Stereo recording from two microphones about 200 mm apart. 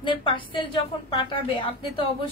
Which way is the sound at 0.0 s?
25° left (ahead or behind).